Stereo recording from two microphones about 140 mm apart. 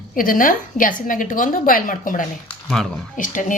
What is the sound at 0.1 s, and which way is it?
A woman's voice, 80° left.